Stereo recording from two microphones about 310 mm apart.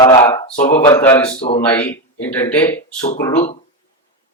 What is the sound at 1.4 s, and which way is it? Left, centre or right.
Speech, centre.